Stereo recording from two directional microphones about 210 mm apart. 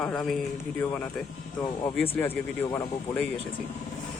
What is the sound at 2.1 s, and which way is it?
A man's voice, 10° left (ahead or behind).